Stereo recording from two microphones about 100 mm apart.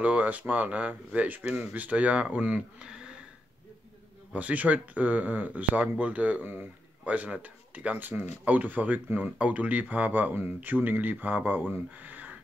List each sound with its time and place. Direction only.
0.0 s speech: 15° right (ahead or behind)
4.3 s speech: 15° right (ahead or behind)